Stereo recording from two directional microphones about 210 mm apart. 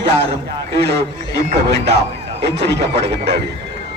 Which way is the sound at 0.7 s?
50° right (ahead or behind).